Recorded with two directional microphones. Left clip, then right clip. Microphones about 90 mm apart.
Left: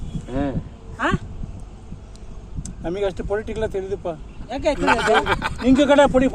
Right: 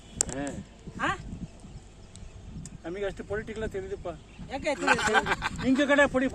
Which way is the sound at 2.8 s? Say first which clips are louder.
Left 10 dB; 75° left (ahead or behind).